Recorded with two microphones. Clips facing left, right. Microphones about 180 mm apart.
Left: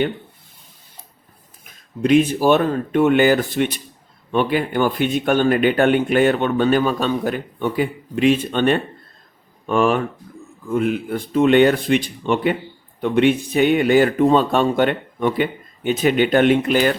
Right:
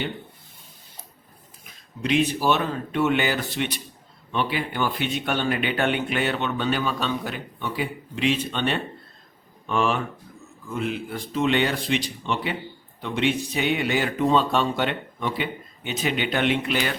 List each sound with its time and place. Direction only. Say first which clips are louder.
1.6 s speech: left 9 dB; 50° left (ahead or behind)